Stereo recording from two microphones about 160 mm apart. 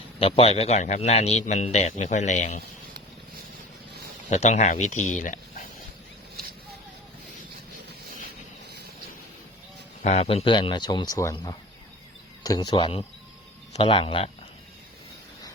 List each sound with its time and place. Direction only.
0.2 s speech: 35° left (ahead or behind)
4.3 s speech: 45° left (ahead or behind)
10.0 s speech: 45° left (ahead or behind)